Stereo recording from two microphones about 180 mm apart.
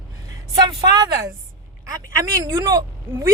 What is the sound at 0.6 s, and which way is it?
Speech, 25° right (ahead or behind).